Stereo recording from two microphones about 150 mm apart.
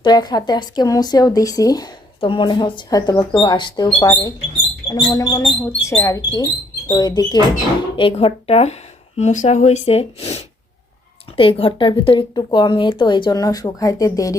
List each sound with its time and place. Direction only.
0.0 s a woman's voice: 30° left (ahead or behind)